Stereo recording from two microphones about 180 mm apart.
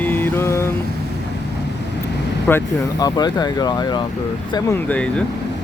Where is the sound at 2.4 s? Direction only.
15° left (ahead or behind).